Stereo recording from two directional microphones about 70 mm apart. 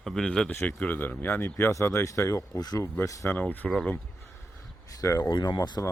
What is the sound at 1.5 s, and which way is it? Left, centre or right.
Speech, left.